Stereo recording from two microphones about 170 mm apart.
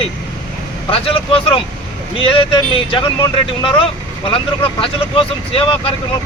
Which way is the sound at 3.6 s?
30° left (ahead or behind).